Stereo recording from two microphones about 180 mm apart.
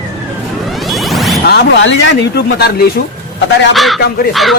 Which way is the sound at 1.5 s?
70° left (ahead or behind).